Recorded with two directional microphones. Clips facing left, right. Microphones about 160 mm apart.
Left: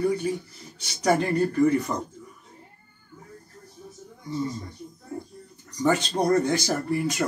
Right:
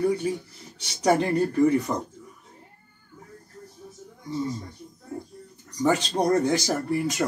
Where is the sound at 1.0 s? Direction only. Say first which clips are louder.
Right 1 dB; 20° right (ahead or behind).